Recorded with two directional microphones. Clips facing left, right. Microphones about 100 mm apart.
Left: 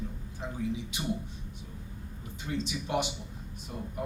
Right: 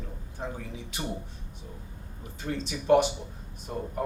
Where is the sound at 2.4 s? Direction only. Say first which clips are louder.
Right 2 dB; 45° right (ahead or behind).